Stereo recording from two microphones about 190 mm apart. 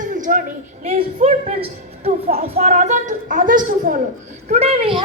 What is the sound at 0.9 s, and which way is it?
A woman's voice, 35° right (ahead or behind).